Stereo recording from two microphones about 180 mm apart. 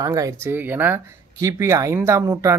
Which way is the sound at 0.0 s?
20° right (ahead or behind).